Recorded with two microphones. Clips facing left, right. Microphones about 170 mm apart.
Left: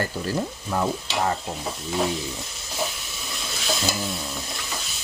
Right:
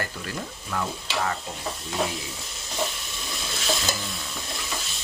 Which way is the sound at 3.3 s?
Centre (ahead or behind).